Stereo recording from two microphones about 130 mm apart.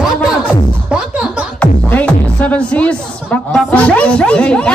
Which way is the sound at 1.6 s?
10° left (ahead or behind).